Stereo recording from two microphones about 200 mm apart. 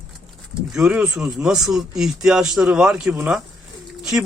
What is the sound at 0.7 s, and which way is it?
Speech, 5° right (ahead or behind).